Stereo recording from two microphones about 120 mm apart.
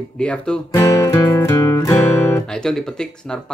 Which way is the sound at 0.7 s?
25° left (ahead or behind).